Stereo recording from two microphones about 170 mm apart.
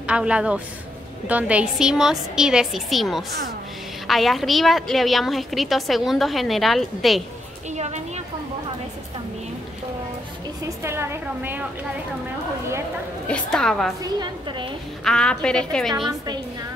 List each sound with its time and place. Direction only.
0.0 s a woman's voice: 5° right (ahead or behind)
7.7 s a woman's voice: 40° right (ahead or behind)
10.8 s a woman's voice: 15° right (ahead or behind)
13.3 s a woman's voice: 5° left (ahead or behind)
14.0 s a woman's voice: 25° right (ahead or behind)
15.0 s a woman's voice: 5° left (ahead or behind)